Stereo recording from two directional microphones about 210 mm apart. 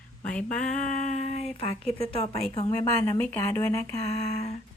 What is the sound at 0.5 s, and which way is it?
Speech, 5° left (ahead or behind).